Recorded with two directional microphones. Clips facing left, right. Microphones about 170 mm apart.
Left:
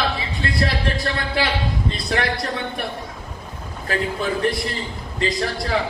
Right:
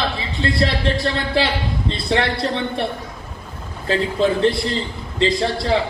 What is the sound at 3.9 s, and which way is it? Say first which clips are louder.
A man's voice: right 5 dB; 25° right (ahead or behind).